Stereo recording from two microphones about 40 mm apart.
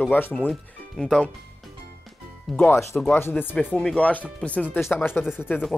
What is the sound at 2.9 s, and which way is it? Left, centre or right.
Speech, left.